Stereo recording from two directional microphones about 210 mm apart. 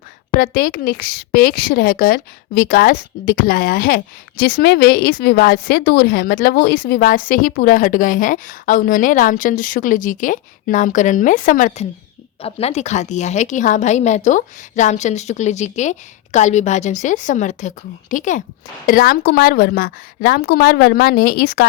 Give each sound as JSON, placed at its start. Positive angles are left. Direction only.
{"t": 0.3, "sound": "a woman's voice", "side_deg": 45}
{"t": 12.4, "sound": "a woman's voice", "side_deg": 30}